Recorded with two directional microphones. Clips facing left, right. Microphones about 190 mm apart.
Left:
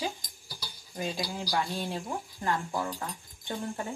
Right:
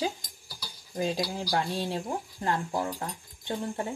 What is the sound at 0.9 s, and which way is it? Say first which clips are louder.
Speech: right 4 dB; 40° right (ahead or behind).